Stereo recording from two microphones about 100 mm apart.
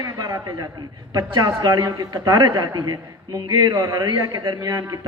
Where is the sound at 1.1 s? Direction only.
35° right (ahead or behind).